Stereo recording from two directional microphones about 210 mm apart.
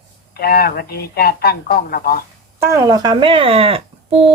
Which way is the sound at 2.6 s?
15° right (ahead or behind).